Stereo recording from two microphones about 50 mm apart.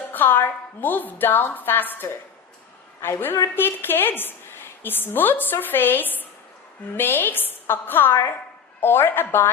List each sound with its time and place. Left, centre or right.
0.1 s a woman's voice: left